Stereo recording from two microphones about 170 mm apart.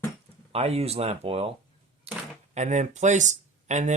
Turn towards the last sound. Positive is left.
turn(degrees=-45)  # may be behind; listen again after turning